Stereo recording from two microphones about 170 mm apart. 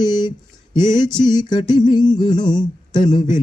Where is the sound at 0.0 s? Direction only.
25° left (ahead or behind).